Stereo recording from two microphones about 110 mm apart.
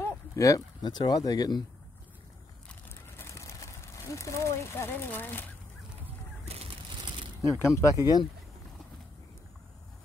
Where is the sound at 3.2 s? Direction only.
25° left (ahead or behind).